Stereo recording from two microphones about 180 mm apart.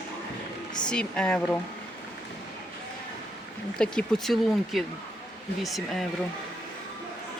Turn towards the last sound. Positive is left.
turn(degrees=0)  # may be behind; listen again after turning